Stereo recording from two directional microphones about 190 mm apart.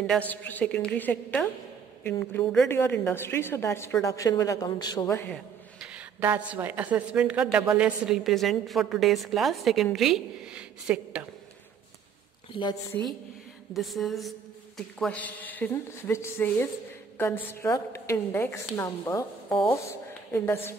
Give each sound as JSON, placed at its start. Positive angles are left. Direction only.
{"t": 0.3, "sound": "a woman's voice", "side_deg": 10}
{"t": 5.8, "sound": "a woman's voice", "side_deg": -10}
{"t": 13.7, "sound": "a woman's voice", "side_deg": 0}